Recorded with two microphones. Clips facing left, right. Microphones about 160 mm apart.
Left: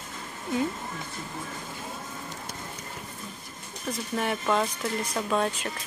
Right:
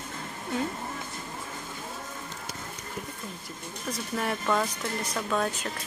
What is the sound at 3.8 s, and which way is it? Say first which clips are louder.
Speech: left 2 dB; centre (ahead or behind).